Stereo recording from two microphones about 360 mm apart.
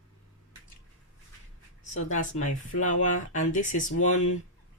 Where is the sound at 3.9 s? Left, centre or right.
Left.